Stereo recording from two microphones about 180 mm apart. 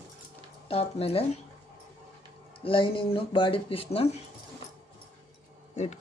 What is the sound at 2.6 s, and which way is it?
Speech, 30° left (ahead or behind).